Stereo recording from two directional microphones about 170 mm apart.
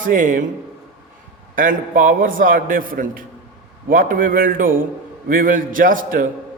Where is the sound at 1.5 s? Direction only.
50° right (ahead or behind).